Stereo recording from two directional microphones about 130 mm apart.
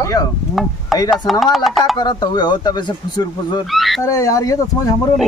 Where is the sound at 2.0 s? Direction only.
35° left (ahead or behind).